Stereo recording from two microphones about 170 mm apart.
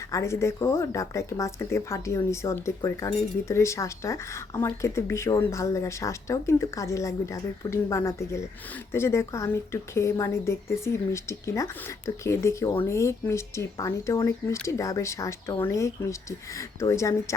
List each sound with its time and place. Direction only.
0.1 s speech: 15° left (ahead or behind)